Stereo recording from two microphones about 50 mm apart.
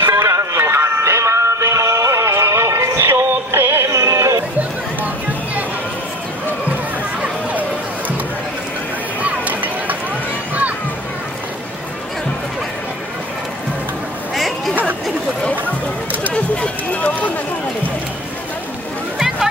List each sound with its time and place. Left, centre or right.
0.0 s music: right
3.0 s synthetic singing: right
3.9 s music: right
9.2 s a sound: right
16.3 s run: left